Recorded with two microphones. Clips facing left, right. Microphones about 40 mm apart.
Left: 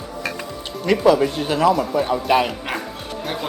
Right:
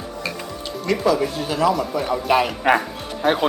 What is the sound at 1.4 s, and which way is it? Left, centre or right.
Speech, left.